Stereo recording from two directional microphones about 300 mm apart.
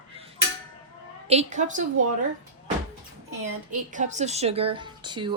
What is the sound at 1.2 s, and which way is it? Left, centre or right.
Speech, right.